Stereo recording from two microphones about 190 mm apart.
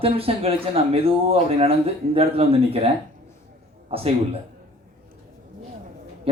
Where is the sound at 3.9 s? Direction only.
30° right (ahead or behind).